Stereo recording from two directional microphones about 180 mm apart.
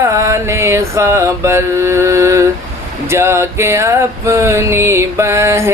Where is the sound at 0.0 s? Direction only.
15° right (ahead or behind).